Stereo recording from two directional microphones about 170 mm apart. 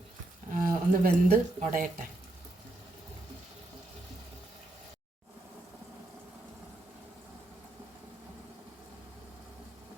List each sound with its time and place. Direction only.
0.5 s speech: 55° right (ahead or behind)